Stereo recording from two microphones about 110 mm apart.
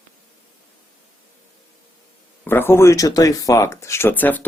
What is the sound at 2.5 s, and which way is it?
A man's voice, 20° left (ahead or behind).